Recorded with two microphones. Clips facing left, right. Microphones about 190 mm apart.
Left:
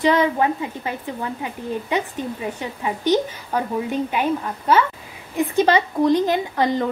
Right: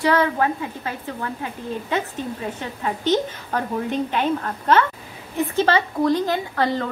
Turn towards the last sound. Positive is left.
turn(degrees=20)  # may be behind; listen again after turning